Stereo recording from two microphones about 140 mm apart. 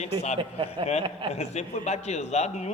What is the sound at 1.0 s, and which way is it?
Speech, 40° right (ahead or behind).